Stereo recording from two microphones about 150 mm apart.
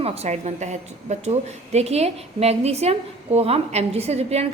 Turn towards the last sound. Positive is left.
turn(degrees=-45)  # may be behind; listen again after turning